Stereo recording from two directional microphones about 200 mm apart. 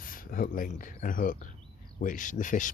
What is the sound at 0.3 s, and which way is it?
Speech, 45° left (ahead or behind).